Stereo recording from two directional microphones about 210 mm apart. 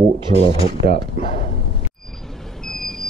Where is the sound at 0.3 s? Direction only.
30° left (ahead or behind).